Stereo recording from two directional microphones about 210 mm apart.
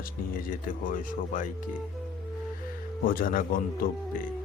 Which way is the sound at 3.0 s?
40° left (ahead or behind).